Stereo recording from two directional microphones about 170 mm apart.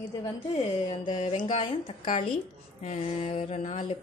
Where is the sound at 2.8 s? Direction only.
40° left (ahead or behind).